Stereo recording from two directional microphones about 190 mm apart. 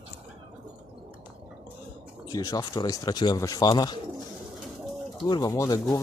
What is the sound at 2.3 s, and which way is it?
Speech, 20° left (ahead or behind).